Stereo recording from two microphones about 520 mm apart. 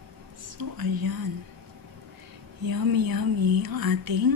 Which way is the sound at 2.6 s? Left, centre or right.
Right.